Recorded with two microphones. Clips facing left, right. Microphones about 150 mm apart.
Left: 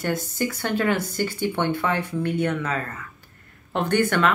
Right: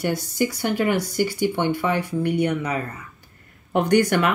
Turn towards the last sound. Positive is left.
turn(degrees=-15)  # may be behind; listen again after turning